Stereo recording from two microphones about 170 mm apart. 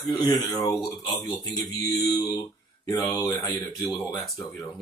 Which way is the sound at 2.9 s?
20° left (ahead or behind).